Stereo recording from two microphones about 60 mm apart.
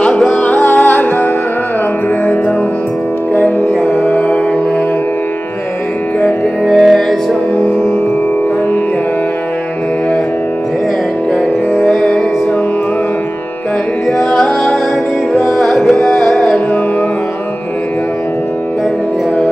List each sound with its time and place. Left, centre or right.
0.3 s music: left
3.3 s music: left
6.6 s music: centre
11.7 s music: centre
14.0 s music: centre